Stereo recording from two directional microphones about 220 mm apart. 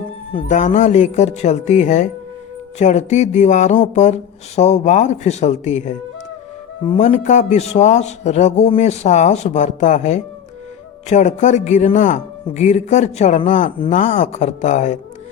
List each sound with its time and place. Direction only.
0.3 s speech: 35° left (ahead or behind)